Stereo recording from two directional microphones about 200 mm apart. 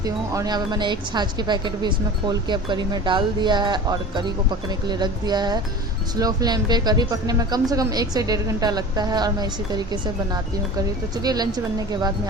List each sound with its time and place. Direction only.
0.0 s speech: 20° right (ahead or behind)